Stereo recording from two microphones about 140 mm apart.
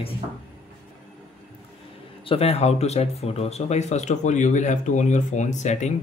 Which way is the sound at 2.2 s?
45° left (ahead or behind).